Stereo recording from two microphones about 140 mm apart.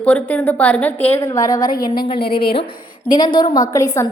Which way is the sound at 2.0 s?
40° left (ahead or behind).